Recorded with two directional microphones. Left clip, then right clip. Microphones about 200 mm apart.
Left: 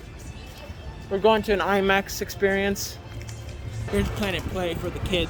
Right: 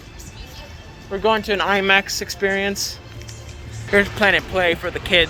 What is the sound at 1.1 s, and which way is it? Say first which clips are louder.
Speech: right 1 dB; 20° left (ahead or behind).